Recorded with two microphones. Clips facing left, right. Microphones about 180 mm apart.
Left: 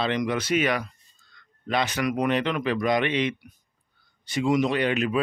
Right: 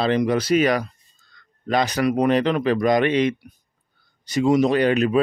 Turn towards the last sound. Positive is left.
turn(degrees=-40)  # may be behind; listen again after turning